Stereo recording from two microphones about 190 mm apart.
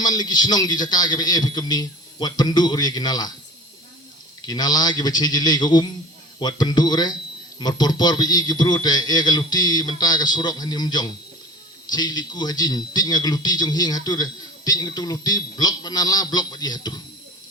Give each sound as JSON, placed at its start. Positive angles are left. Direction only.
{"t": 0.0, "sound": "a man's voice", "side_deg": 20}
{"t": 4.4, "sound": "a man's voice", "side_deg": 20}